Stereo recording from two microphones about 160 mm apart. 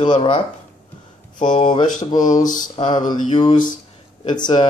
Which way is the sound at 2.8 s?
30° left (ahead or behind).